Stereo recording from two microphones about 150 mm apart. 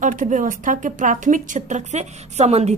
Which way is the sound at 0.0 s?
60° right (ahead or behind).